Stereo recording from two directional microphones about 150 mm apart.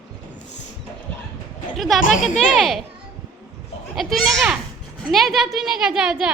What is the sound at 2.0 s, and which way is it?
Speech, 60° left (ahead or behind).